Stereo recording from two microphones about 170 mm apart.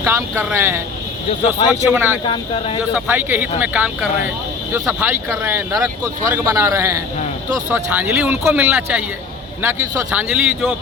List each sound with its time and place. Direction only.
0.0 s speech: 15° right (ahead or behind)
1.9 s speech: 10° right (ahead or behind)
2.2 s speech: 30° left (ahead or behind)
2.9 s speech: 10° right (ahead or behind)